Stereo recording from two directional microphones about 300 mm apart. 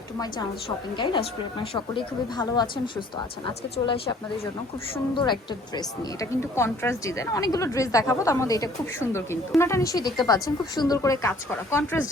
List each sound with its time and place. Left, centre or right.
0.9 s a woman's voice: centre
5.1 s a woman's voice: centre